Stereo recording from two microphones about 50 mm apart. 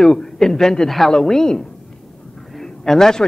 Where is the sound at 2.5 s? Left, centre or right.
Centre.